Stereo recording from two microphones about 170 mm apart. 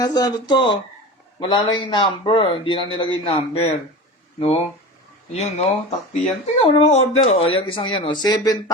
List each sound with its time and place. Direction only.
0.0 s a man's voice: 25° left (ahead or behind)